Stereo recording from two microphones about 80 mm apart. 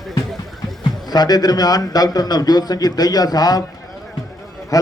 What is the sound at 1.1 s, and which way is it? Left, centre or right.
A man's voice, left.